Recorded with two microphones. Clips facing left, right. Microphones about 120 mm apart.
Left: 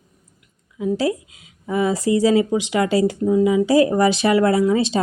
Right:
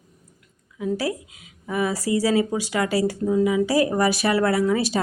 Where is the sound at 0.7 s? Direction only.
25° left (ahead or behind).